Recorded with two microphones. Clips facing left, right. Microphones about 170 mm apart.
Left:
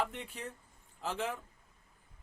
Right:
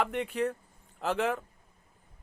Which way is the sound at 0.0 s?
70° right (ahead or behind).